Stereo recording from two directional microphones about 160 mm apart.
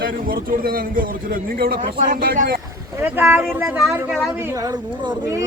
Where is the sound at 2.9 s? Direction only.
15° right (ahead or behind).